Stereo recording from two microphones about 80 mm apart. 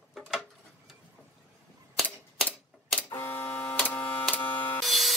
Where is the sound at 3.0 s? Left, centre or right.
Left.